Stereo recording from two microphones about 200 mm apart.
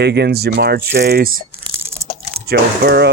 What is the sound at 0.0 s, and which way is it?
Speech, 55° right (ahead or behind).